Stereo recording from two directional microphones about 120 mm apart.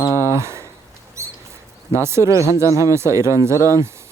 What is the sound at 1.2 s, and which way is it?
Rodents, 25° right (ahead or behind).